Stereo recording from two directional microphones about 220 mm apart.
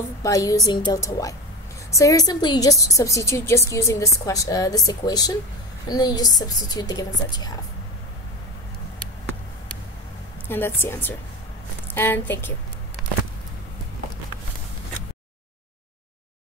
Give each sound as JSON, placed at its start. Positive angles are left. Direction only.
{"t": 0.2, "sound": "a woman's voice", "side_deg": 15}
{"t": 10.5, "sound": "a woman's voice", "side_deg": 10}